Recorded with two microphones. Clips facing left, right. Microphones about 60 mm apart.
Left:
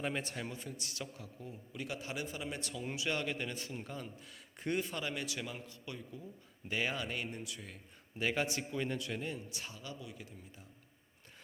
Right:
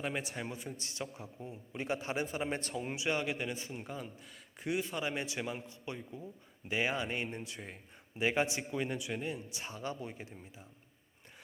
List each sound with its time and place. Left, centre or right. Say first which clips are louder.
0.0 s speech: right 1 dB; centre
0.7 s a man's voice: right 2 dB; right
2.8 s speech: right 1 dB; right; by 4.9 s centre
4.9 s a man's voice: right 3 dB; right
8.2 s speech: right 3 dB; centre
9.6 s speech: right 6 dB; right